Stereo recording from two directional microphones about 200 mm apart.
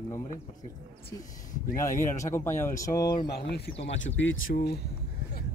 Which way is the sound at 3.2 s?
55° left (ahead or behind).